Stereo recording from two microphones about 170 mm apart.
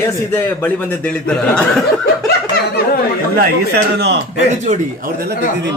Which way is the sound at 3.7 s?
80° right.